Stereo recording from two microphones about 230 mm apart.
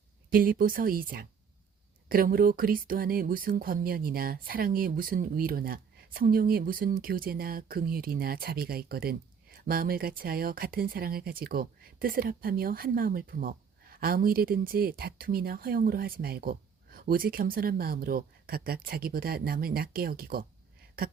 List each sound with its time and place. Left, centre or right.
0.3 s speech: right